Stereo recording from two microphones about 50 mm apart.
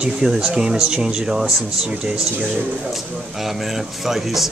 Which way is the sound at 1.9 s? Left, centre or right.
Centre.